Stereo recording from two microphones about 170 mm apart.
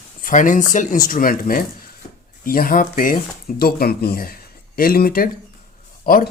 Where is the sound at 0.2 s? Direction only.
50° left (ahead or behind).